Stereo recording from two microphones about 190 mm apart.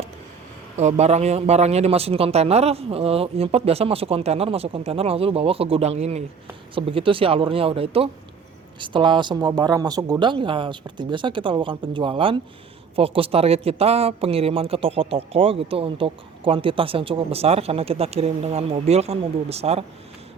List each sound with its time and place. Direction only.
0.8 s speech: 35° right (ahead or behind)